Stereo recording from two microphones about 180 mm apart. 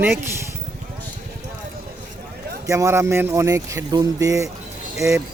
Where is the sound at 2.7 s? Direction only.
15° right (ahead or behind).